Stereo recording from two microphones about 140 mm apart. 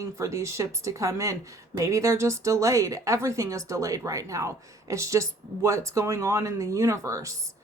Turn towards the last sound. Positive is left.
turn(degrees=-20)  # may be behind; listen again after turning